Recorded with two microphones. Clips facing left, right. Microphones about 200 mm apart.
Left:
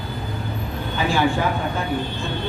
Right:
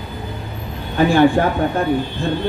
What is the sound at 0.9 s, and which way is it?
Speech, 55° right (ahead or behind).